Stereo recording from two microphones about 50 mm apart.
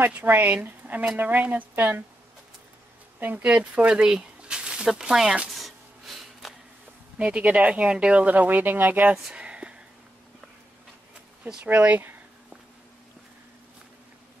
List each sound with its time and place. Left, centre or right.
0.2 s speech: right
3.2 s speech: right
3.5 s speech: right
3.9 s speech: centre
5.5 s a sound: centre
7.2 s speech: right
9.1 s a sound: centre
11.6 s speech: right